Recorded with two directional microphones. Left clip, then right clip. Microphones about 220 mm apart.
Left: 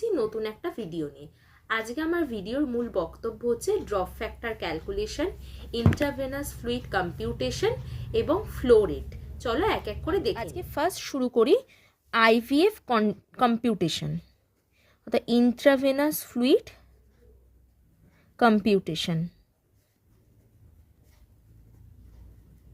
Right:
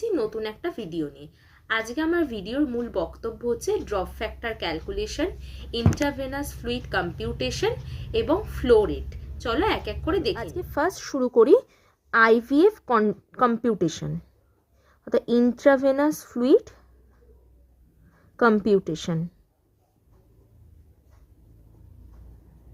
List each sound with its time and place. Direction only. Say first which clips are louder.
0.0 s a woman's voice: right 1 dB; centre (ahead or behind)
10.5 s a woman's voice: right 2 dB; 20° left (ahead or behind)
18.3 s a woman's voice: right 2 dB; 20° left (ahead or behind)